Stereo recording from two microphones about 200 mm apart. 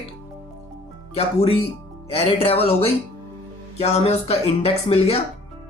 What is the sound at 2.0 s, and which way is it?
Speech, 30° left (ahead or behind).